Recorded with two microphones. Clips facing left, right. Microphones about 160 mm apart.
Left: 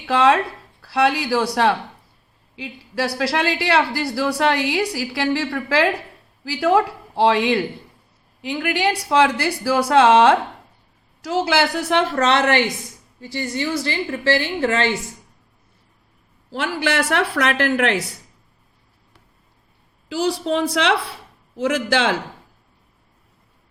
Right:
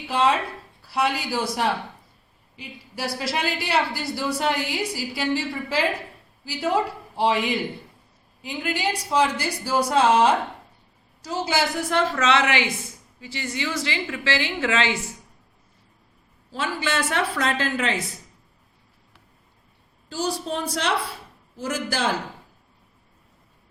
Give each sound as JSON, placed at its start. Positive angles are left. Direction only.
{"t": 0.1, "sound": "a woman's voice", "side_deg": 90}
{"t": 8.4, "sound": "a woman's voice", "side_deg": 75}
{"t": 9.0, "sound": "a woman's voice", "side_deg": 90}
{"t": 12.2, "sound": "a woman's voice", "side_deg": 60}
{"t": 16.5, "sound": "a woman's voice", "side_deg": 80}
{"t": 20.1, "sound": "a woman's voice", "side_deg": 90}